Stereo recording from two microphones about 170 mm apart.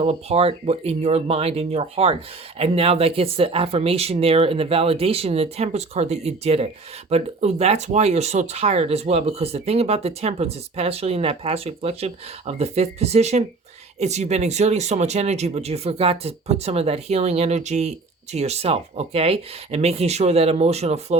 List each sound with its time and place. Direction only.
0.0 s speech: 35° right (ahead or behind)